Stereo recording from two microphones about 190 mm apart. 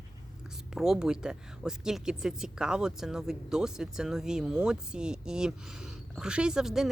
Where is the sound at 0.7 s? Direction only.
5° right (ahead or behind).